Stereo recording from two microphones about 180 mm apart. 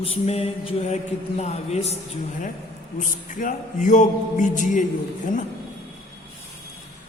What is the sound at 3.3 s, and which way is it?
A man's voice, 45° left (ahead or behind).